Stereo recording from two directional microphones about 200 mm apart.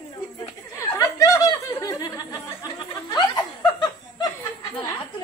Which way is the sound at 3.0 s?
20° left (ahead or behind).